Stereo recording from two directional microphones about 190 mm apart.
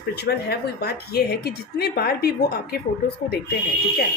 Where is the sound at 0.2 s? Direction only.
60° left (ahead or behind).